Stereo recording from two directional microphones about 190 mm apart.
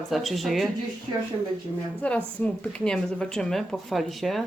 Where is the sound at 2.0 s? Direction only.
5° left (ahead or behind).